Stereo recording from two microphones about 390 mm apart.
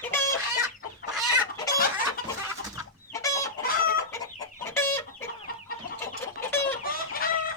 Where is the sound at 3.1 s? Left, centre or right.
Centre.